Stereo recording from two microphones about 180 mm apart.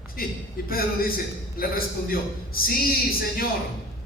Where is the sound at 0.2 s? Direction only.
55° left (ahead or behind).